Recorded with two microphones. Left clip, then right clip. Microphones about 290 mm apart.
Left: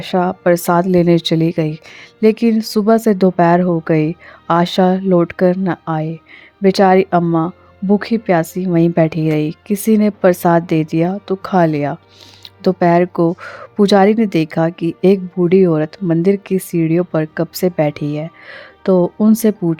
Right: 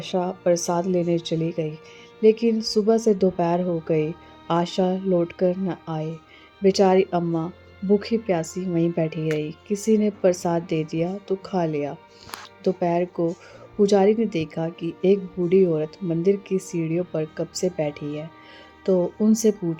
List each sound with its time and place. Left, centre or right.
0.1 s a woman's voice: left